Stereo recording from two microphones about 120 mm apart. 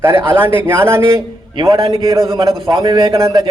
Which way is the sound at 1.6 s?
45° right (ahead or behind).